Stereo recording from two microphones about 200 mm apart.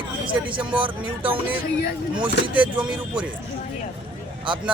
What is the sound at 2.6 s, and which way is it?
Speech, 5° right (ahead or behind).